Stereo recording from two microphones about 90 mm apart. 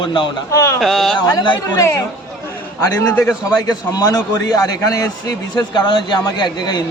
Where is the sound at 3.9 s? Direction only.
45° left (ahead or behind).